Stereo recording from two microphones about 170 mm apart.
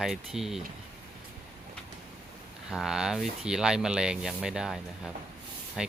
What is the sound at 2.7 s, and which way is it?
Speech, centre (ahead or behind).